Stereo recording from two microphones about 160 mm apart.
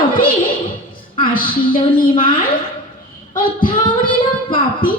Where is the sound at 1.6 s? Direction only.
30° left (ahead or behind).